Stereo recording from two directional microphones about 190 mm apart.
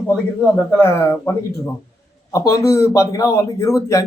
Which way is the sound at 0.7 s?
10° left (ahead or behind).